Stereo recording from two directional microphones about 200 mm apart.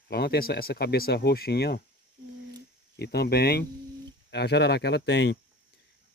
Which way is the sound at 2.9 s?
55° left (ahead or behind).